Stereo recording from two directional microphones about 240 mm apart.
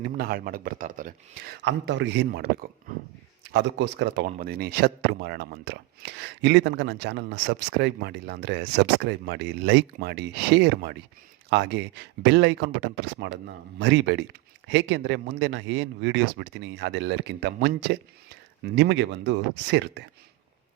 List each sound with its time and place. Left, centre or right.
0.0 s speech: right